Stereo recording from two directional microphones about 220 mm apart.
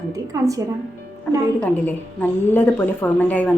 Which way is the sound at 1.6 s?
10° left (ahead or behind).